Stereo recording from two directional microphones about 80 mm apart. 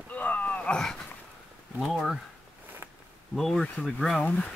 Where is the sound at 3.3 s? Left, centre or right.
Centre.